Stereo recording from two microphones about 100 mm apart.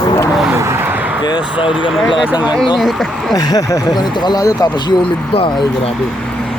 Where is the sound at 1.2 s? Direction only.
45° left (ahead or behind).